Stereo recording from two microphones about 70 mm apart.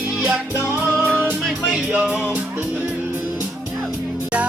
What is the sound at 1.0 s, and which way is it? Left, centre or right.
Music, right.